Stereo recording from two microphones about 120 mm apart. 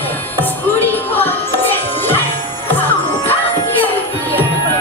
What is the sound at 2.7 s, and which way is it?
Music, 15° left (ahead or behind).